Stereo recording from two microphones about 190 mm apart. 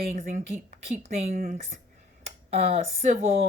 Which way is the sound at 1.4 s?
45° right (ahead or behind).